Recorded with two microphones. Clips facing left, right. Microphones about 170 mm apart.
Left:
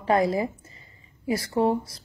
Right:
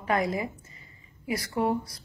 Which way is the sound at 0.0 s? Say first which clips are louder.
Left 5 dB; 30° left (ahead or behind).